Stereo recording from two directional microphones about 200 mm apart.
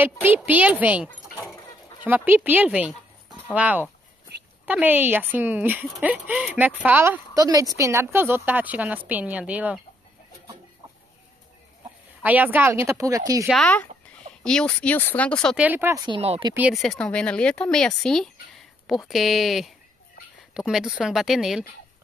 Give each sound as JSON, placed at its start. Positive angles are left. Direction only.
{"t": 0.0, "sound": "speech", "side_deg": -10}
{"t": 12.2, "sound": "speech", "side_deg": -10}
{"t": 13.5, "sound": "speech", "side_deg": 5}
{"t": 15.6, "sound": "speech", "side_deg": -10}
{"t": 16.1, "sound": "speech", "side_deg": -30}
{"t": 16.5, "sound": "speech", "side_deg": -5}